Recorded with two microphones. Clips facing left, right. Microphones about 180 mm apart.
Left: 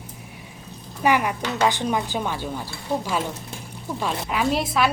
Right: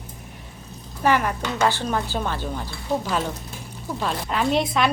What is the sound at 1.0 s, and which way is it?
A woman's voice, 10° left (ahead or behind).